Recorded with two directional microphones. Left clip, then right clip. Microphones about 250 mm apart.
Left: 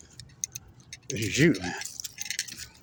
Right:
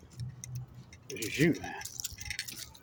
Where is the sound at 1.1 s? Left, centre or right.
Left.